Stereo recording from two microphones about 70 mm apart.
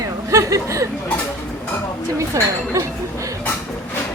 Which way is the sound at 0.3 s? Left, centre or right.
Right.